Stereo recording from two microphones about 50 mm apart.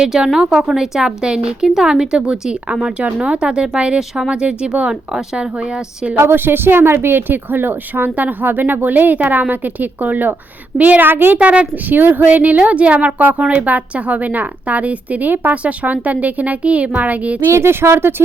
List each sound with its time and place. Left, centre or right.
0.0 s a woman's voice: centre
6.1 s a woman's voice: right
11.1 s speech: right
11.3 s a woman's voice: right
11.7 s a woman's voice: right
17.5 s speech: right